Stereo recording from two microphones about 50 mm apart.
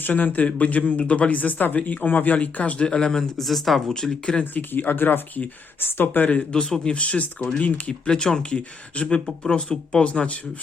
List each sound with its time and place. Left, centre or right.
0.0 s speech: left
2.8 s speech: centre
4.5 s speech: left
6.5 s speech: centre
8.0 s speech: centre